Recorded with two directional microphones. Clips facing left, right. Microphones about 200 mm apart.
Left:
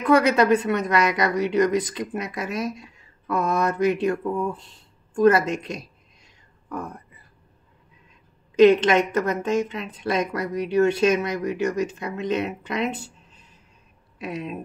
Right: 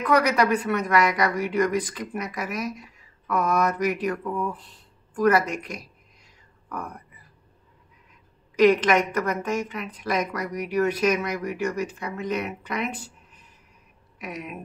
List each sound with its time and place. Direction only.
0.0 s a woman's voice: 25° left (ahead or behind)
8.5 s a woman's voice: 25° left (ahead or behind)
14.1 s speech: 30° left (ahead or behind)